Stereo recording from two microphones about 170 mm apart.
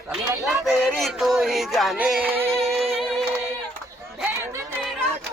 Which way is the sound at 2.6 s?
35° right (ahead or behind).